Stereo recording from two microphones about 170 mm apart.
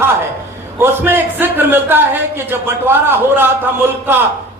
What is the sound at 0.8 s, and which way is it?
A man's voice, 10° right (ahead or behind).